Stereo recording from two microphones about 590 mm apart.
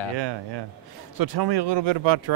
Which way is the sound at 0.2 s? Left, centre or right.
Right.